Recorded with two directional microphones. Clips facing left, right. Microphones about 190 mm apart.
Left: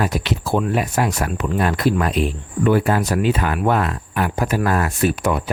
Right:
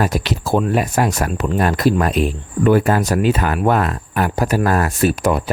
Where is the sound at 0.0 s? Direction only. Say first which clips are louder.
Right 2 dB; 40° right (ahead or behind).